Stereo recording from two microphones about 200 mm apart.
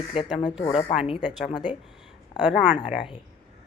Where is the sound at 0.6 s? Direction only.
25° left (ahead or behind).